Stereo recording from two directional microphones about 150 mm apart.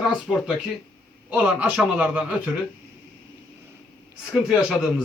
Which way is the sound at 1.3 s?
10° right (ahead or behind).